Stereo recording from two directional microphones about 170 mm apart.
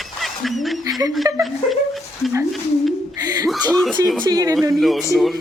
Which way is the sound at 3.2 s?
25° right (ahead or behind).